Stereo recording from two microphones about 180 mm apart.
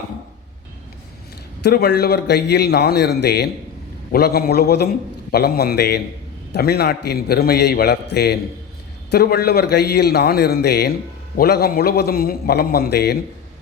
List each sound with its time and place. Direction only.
1.6 s a man's voice: 60° left (ahead or behind)